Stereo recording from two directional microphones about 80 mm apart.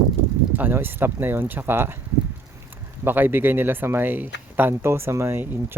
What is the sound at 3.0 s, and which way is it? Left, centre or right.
Speech, right.